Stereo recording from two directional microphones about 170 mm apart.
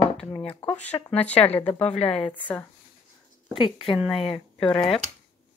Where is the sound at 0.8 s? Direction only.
10° left (ahead or behind).